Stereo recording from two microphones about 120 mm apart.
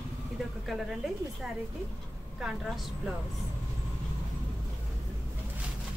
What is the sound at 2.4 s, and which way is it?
Speech, 5° right (ahead or behind).